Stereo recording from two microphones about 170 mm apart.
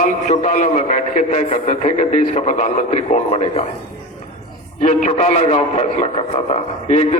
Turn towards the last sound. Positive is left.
turn(degrees=40)  # may be behind; listen again after turning